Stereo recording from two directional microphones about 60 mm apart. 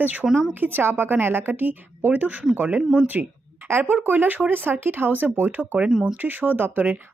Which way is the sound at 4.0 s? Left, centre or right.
Right.